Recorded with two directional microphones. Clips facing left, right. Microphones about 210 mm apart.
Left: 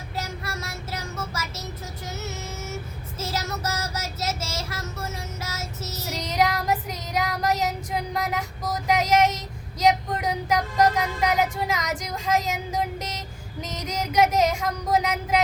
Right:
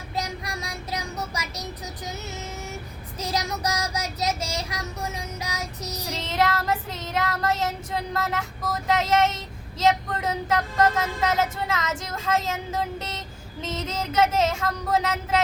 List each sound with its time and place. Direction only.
0.2 s child singing: 15° right (ahead or behind)
2.0 s a sound: 15° right (ahead or behind)
3.2 s child singing: 15° right (ahead or behind)
6.1 s child singing: 15° left (ahead or behind)
8.1 s speech: 15° left (ahead or behind)
13.6 s child singing: 15° left (ahead or behind)